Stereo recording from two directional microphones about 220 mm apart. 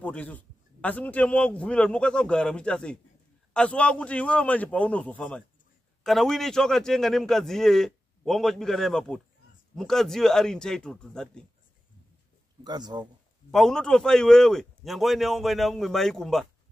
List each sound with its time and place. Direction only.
0.0 s a man's voice: 5° left (ahead or behind)
12.6 s a man's voice: 20° right (ahead or behind)
13.5 s a man's voice: centre (ahead or behind)